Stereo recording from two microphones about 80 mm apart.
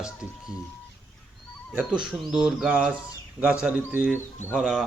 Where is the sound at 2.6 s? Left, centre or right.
Right.